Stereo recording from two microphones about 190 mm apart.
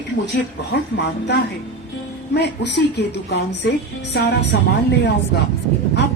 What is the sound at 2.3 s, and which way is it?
Music, 60° left (ahead or behind).